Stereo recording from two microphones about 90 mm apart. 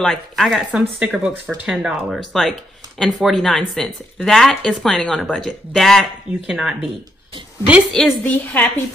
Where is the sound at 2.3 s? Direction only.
Centre (ahead or behind).